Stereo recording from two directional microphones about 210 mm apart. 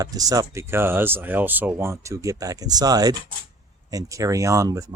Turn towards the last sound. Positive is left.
turn(degrees=-15)  # may be behind; listen again after turning